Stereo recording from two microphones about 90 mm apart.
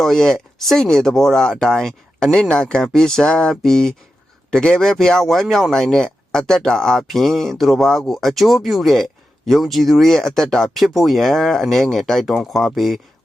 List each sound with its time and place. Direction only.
0.0 s speech: 5° left (ahead or behind)